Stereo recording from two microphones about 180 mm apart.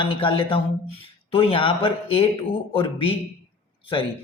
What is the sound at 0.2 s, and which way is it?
A man's voice, 30° left (ahead or behind).